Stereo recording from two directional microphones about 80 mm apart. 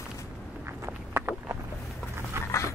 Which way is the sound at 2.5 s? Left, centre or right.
Left.